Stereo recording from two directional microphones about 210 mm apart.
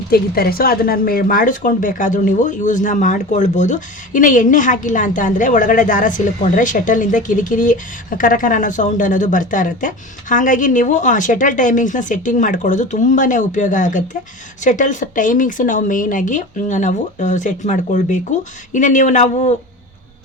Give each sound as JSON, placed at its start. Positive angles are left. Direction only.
{"t": 0.1, "sound": "a woman's voice", "side_deg": 45}